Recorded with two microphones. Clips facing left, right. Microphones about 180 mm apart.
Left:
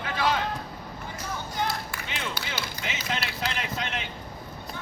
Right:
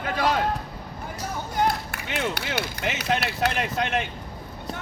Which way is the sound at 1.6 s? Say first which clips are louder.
Right 7 dB; 60° right (ahead or behind).